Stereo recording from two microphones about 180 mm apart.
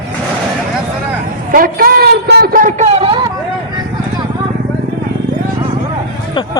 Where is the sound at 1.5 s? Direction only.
50° right (ahead or behind); by 2.6 s 65° right (ahead or behind).